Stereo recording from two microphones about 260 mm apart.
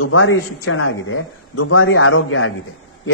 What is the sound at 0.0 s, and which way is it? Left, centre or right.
A man's voice, left.